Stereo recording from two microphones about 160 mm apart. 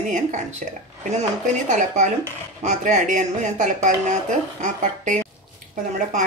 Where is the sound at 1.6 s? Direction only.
50° right (ahead or behind).